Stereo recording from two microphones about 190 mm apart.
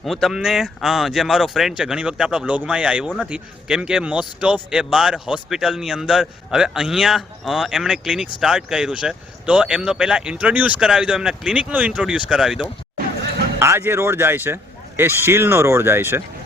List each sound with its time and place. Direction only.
0.0 s speech: centre (ahead or behind)